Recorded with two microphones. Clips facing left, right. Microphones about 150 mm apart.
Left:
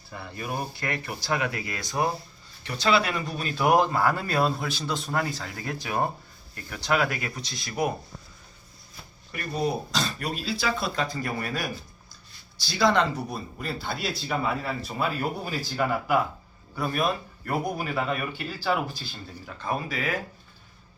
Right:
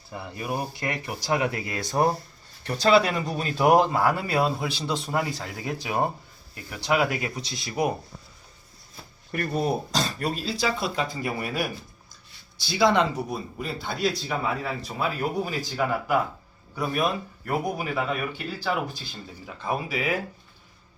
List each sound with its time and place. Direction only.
0.1 s speech: 15° right (ahead or behind)
9.3 s speech: 50° right (ahead or behind)
9.9 s speech: 40° right (ahead or behind)
10.6 s a man's voice: 15° right (ahead or behind); by 19.0 s 5° left (ahead or behind)
19.5 s speech: 10° right (ahead or behind)